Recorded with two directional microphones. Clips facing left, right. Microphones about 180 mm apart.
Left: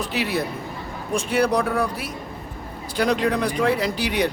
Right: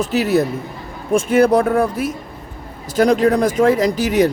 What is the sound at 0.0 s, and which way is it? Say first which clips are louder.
A man's voice: right 8 dB; 45° right (ahead or behind).